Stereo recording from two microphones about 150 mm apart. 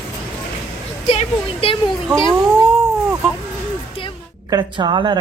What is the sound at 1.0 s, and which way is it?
Speech, 35° left (ahead or behind).